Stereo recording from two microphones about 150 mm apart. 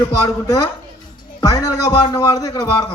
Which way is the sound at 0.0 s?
20° left (ahead or behind).